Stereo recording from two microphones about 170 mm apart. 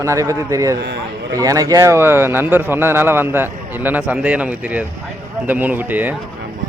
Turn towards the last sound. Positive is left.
turn(degrees=-10)  # may be behind; listen again after turning